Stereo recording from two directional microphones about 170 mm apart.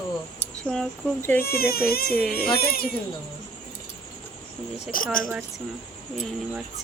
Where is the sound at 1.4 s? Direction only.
65° left (ahead or behind).